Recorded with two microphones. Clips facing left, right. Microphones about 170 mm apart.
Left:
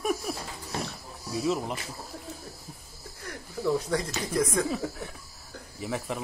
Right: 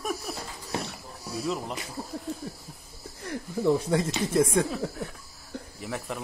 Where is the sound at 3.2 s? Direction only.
30° right (ahead or behind).